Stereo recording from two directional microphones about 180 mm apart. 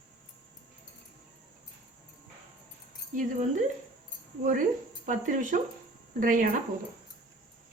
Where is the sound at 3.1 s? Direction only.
45° right (ahead or behind).